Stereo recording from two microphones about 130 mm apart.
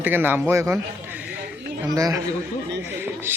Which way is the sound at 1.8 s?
25° right (ahead or behind).